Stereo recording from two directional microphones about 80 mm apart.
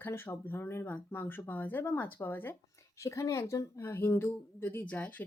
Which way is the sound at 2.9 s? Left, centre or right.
Left.